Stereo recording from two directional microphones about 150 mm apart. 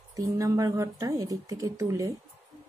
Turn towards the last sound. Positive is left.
turn(degrees=-20)  # may be behind; listen again after turning